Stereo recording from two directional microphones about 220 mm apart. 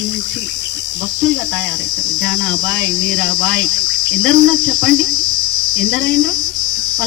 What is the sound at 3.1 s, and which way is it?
Cricket, 60° right (ahead or behind).